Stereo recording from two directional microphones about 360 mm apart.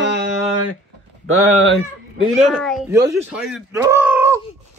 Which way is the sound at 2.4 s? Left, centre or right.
Centre.